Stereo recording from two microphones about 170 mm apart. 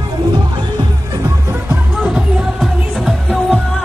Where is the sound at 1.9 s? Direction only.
5° right (ahead or behind).